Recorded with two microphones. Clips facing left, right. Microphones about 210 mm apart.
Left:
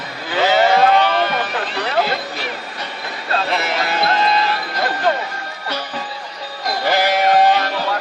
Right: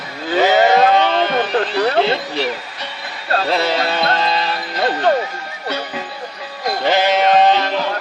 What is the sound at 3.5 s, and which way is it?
Music, 35° right (ahead or behind).